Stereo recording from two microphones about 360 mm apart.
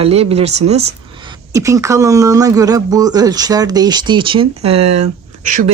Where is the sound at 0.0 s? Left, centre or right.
Centre.